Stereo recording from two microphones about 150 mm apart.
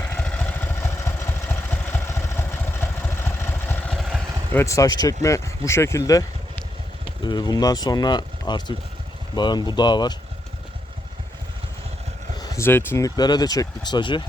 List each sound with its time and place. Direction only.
0.0 s vehicle: 10° left (ahead or behind)
3.9 s vehicle: centre (ahead or behind)
4.5 s speech: 20° left (ahead or behind)
12.4 s speech: 20° left (ahead or behind)